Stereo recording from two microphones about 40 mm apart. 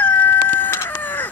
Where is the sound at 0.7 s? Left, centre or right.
Left.